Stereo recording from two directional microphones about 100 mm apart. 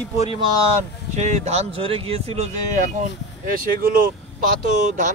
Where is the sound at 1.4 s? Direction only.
90° right.